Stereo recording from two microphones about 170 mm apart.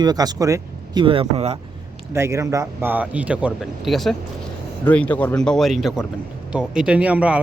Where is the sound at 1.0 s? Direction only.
30° right (ahead or behind).